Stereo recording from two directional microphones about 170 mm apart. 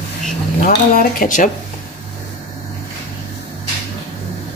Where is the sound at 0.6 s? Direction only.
55° left (ahead or behind).